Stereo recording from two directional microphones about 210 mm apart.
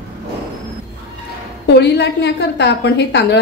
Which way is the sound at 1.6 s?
55° left (ahead or behind).